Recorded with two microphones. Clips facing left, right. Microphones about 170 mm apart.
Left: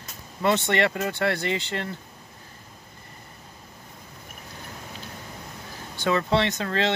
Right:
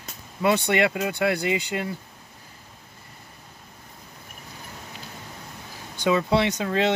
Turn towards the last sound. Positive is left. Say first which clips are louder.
# right 2 dB
turn(degrees=-15)  # may be behind; listen again after turning